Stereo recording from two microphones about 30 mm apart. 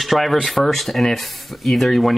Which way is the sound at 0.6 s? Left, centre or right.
Centre.